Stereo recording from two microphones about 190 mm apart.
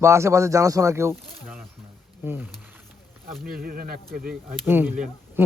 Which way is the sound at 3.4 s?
50° right (ahead or behind).